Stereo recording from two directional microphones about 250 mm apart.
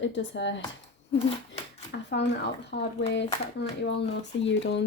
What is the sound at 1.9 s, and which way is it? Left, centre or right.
A woman's voice, left.